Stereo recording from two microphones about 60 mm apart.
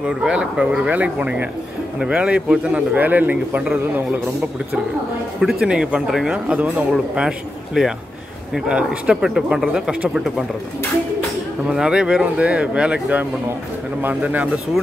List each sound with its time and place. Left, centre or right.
0.0 s a man's voice: centre
5.4 s speech: centre
11.7 s speech: centre